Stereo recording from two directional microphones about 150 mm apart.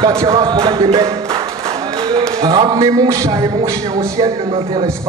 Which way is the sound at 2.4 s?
25° right (ahead or behind).